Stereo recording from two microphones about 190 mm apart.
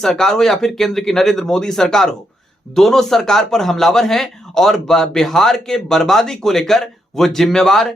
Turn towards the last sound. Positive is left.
turn(degrees=0)  # may be behind; listen again after turning